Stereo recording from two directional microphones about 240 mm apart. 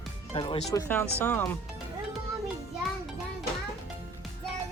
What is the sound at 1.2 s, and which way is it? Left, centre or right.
Speech, centre.